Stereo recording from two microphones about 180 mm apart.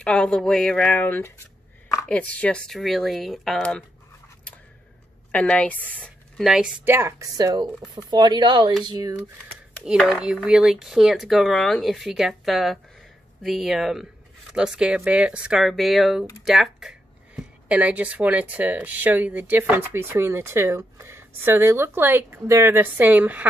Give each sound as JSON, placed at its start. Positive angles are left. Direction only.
{"t": 0.0, "sound": "speech", "side_deg": 5}
{"t": 5.3, "sound": "speech", "side_deg": 5}
{"t": 9.8, "sound": "speech", "side_deg": -5}